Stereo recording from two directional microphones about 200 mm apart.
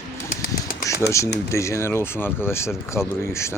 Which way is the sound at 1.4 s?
15° left (ahead or behind).